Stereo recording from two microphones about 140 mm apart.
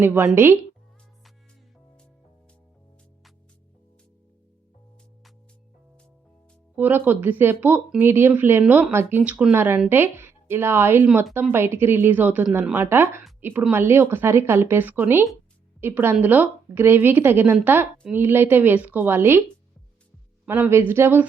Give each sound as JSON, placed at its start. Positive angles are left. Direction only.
{"t": 0.0, "sound": "speech", "side_deg": -15}
{"t": 6.7, "sound": "speech", "side_deg": -15}